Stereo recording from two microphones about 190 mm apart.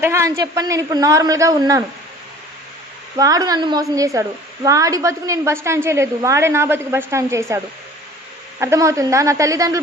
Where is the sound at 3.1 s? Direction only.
20° right (ahead or behind).